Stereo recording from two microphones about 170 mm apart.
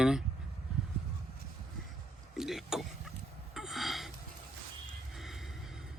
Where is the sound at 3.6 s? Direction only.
Centre (ahead or behind).